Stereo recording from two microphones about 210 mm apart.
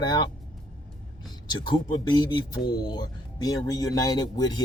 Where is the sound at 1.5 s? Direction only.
20° left (ahead or behind).